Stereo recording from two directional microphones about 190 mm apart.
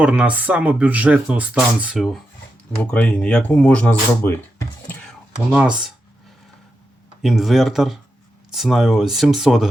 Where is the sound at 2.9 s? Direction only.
5° left (ahead or behind).